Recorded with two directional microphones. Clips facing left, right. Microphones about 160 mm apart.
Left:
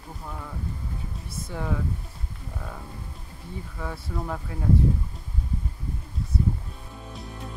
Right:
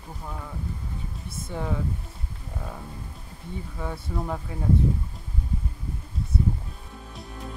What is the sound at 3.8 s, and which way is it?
Speech, 10° right (ahead or behind).